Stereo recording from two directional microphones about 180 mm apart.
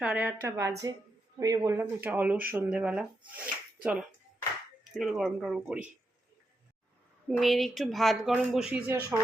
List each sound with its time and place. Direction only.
0.0 s speech: 10° right (ahead or behind)
7.3 s speech: centre (ahead or behind)